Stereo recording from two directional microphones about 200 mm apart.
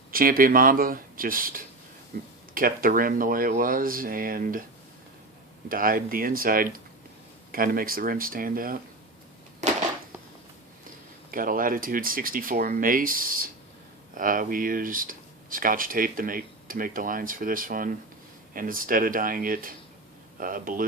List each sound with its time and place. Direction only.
0.1 s speech: 45° right (ahead or behind)
5.6 s speech: 45° right (ahead or behind)
11.3 s speech: 45° right (ahead or behind)